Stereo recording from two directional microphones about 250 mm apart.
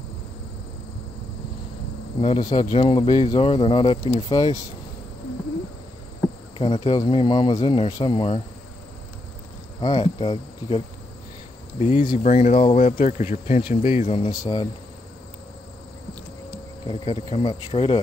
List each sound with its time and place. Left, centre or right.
2.2 s speech: centre
4.4 s insect: centre
6.6 s speech: centre
9.8 s insect: centre
11.8 s speech: left
16.8 s speech: centre